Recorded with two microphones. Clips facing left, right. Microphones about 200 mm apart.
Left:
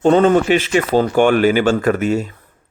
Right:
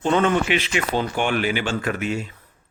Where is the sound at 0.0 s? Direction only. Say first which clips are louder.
Left 8 dB; 40° left (ahead or behind).